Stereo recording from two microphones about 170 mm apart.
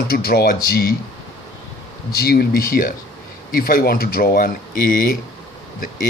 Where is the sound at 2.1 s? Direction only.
65° left (ahead or behind).